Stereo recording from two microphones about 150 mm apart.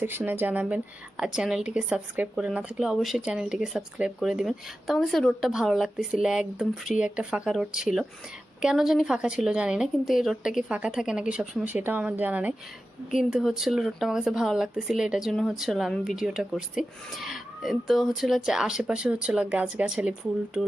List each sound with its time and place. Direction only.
0.0 s a woman's voice: 15° right (ahead or behind)